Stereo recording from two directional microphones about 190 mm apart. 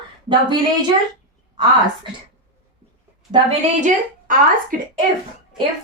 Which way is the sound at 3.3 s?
25° right (ahead or behind).